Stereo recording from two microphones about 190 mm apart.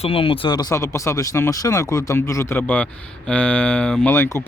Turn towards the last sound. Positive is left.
turn(degrees=10)  # may be behind; listen again after turning